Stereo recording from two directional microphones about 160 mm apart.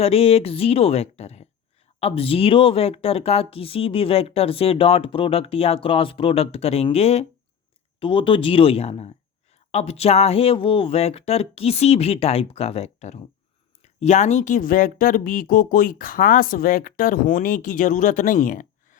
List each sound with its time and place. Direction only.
0.0 s speech: 40° left (ahead or behind); by 18.9 s 55° left (ahead or behind)